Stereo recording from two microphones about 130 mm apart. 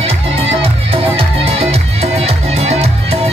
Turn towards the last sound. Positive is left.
turn(degrees=-55)  # may be behind; listen again after turning